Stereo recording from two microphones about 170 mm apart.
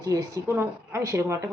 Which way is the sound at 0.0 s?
20° right (ahead or behind).